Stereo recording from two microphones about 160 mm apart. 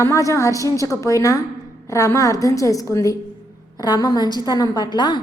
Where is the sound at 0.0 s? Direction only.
20° left (ahead or behind).